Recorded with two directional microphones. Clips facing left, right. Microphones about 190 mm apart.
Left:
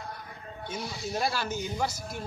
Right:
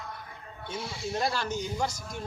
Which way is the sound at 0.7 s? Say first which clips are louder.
Right 1 dB; 25° right (ahead or behind).